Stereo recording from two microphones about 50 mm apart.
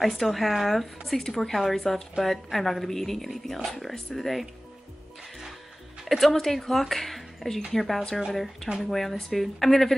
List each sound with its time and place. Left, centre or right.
0.0 s speech: centre
6.0 s speech: centre